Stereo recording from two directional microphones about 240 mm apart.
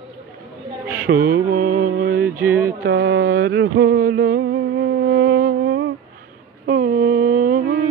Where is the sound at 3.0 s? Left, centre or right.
Right.